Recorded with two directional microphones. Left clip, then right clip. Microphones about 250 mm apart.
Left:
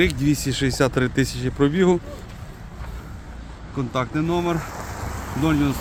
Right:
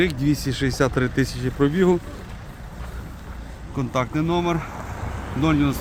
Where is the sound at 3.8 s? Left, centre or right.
Centre.